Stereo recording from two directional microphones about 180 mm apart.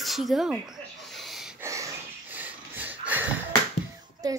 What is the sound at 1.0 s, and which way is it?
Snort, centre (ahead or behind).